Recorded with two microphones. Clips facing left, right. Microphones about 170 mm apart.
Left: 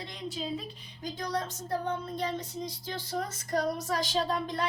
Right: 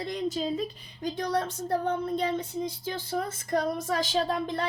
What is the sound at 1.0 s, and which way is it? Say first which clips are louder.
Speech: right 5 dB; 60° right (ahead or behind).